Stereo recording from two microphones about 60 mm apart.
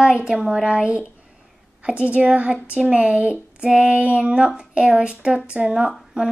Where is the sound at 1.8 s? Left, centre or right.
Centre.